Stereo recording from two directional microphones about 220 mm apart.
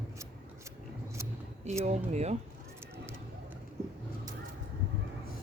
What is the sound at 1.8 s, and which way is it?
Speech, 30° right (ahead or behind).